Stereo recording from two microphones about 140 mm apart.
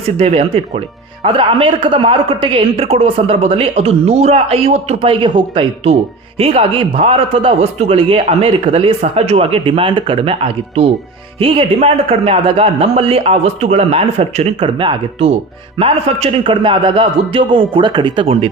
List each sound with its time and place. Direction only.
0.2 s a man's voice: 45° right (ahead or behind)